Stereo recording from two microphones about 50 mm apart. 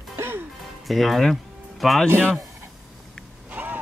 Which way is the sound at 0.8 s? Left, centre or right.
Centre.